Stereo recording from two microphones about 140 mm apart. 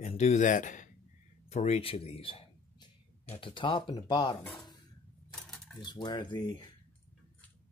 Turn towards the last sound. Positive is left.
turn(degrees=35)  # may be behind; listen again after turning